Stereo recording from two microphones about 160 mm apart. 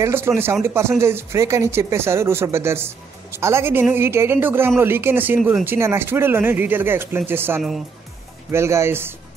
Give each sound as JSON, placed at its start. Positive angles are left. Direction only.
{"t": 0.0, "sound": "speech", "side_deg": -15}